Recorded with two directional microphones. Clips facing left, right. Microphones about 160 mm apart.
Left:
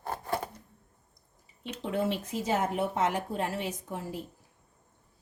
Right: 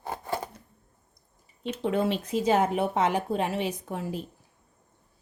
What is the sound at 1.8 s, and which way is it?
Speech, 90° right.